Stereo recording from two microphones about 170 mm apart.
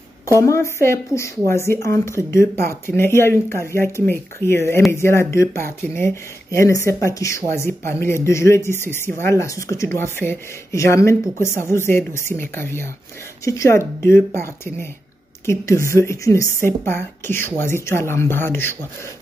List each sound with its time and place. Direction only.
0.4 s speech: 15° left (ahead or behind)